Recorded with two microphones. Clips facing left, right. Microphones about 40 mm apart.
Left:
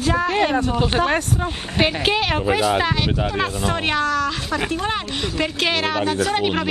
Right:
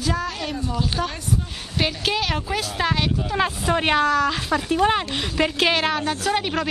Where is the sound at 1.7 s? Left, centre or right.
Left.